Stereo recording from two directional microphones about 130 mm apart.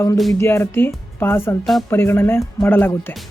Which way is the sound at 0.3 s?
20° left (ahead or behind).